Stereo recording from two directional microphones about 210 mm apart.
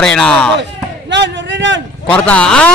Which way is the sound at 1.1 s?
55° right (ahead or behind).